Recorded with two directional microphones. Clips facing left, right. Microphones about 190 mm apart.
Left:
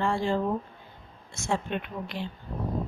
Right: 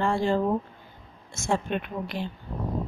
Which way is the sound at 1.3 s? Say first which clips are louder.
Right 3 dB; 45° right (ahead or behind).